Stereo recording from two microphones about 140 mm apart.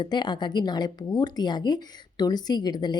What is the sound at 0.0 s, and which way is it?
A woman's voice, 30° left (ahead or behind).